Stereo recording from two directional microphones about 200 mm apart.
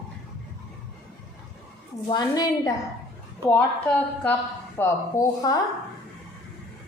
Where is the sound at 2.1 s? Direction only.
20° left (ahead or behind).